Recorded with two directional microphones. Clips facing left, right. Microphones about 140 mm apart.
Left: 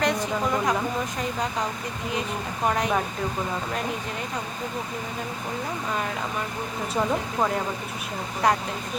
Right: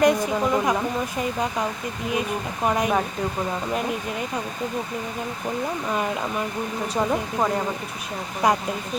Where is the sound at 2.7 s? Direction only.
10° right (ahead or behind).